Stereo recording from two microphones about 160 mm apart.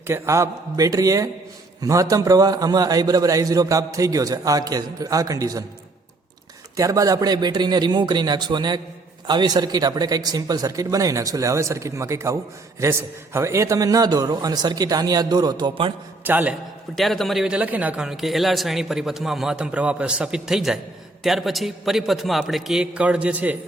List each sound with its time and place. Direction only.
0.1 s a man's voice: 20° right (ahead or behind)
6.7 s a man's voice: 20° right (ahead or behind)
16.2 s a man's voice: 10° right (ahead or behind)
16.9 s a man's voice: centre (ahead or behind)